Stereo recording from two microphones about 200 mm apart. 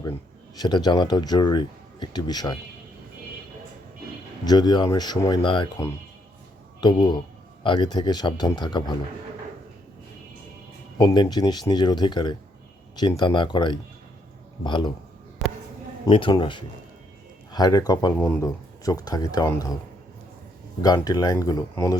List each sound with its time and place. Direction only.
0.6 s speech: 20° left (ahead or behind)
4.4 s speech: 20° left (ahead or behind)
6.8 s speech: 20° left (ahead or behind)
10.9 s speech: 20° left (ahead or behind)
15.4 s a sound: centre (ahead or behind)
16.0 s speech: 25° left (ahead or behind)
20.8 s speech: 20° left (ahead or behind)